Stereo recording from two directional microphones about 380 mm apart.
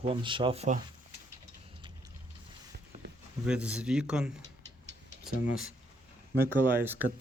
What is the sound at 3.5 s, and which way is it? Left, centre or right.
Speech, centre.